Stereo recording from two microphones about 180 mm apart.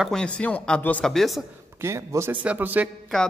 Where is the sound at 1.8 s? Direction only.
15° right (ahead or behind).